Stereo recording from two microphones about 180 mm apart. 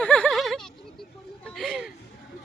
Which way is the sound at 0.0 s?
5° left (ahead or behind).